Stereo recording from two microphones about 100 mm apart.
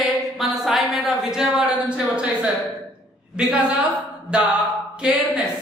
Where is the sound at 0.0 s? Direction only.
Centre (ahead or behind).